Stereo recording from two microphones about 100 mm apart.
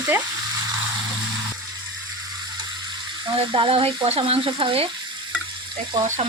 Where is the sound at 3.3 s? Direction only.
70° right (ahead or behind).